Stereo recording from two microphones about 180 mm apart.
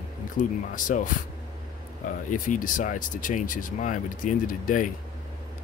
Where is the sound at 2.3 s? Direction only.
50° left (ahead or behind).